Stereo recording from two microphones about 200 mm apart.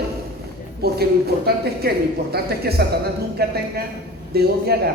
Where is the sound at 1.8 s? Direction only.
50° right (ahead or behind).